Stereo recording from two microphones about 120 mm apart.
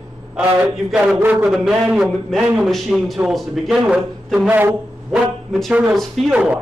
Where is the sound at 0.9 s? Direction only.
10° right (ahead or behind).